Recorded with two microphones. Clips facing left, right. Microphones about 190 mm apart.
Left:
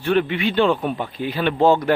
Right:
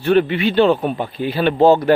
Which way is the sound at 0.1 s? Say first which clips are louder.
Right 4 dB; 40° right (ahead or behind).